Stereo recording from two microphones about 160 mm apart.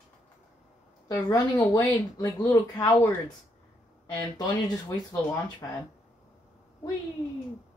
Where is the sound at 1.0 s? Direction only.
20° left (ahead or behind).